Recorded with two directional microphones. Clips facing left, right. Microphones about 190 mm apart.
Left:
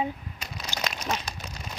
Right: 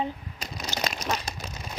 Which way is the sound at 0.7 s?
35° right (ahead or behind).